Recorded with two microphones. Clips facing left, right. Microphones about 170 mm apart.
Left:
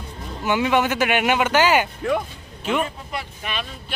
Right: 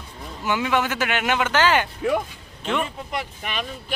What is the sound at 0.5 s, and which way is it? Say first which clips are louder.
Speech: left 3 dB; 20° left (ahead or behind).